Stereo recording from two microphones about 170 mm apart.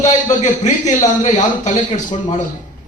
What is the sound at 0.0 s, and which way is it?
A man's voice, 45° left (ahead or behind).